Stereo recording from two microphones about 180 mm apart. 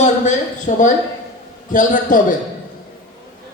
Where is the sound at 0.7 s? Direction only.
45° left (ahead or behind).